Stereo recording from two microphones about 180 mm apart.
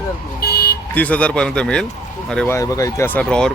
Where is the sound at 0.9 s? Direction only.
10° left (ahead or behind).